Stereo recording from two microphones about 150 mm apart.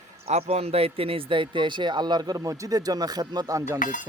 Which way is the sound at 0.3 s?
45° right (ahead or behind).